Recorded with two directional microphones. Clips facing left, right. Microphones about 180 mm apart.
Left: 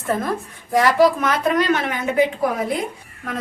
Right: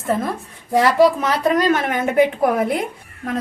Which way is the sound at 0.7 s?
25° right (ahead or behind).